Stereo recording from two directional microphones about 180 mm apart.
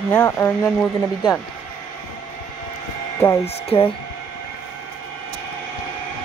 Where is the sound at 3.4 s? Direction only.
30° left (ahead or behind).